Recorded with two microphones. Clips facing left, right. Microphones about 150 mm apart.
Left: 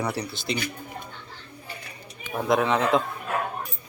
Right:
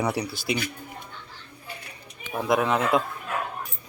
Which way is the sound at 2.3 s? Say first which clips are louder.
Left 1 dB; centre (ahead or behind).